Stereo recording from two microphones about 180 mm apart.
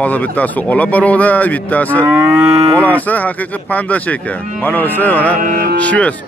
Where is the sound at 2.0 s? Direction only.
15° right (ahead or behind).